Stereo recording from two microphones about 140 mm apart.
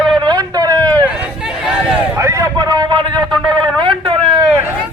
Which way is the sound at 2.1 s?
20° right (ahead or behind).